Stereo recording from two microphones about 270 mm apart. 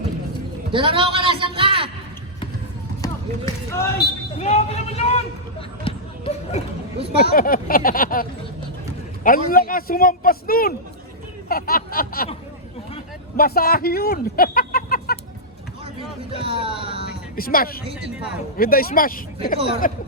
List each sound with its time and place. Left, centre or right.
0.7 s a sound: centre
3.0 s run: centre
4.4 s a man's voice: left
5.8 s basketball bounce: left
7.2 s a man's voice: left
11.4 s snicker: left
13.3 s speech: left
16.0 s speech: centre
17.3 s a man's voice: left